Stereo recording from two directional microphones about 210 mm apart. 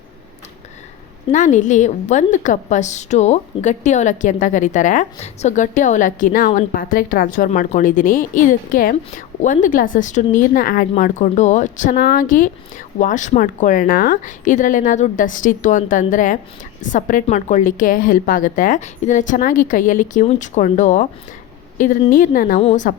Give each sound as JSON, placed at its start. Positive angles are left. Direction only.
{"t": 1.3, "sound": "a woman's voice", "side_deg": 35}